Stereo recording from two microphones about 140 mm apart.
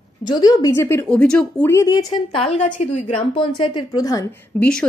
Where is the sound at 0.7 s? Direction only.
15° left (ahead or behind).